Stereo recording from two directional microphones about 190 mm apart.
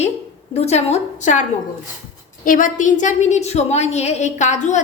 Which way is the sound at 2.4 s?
45° left (ahead or behind).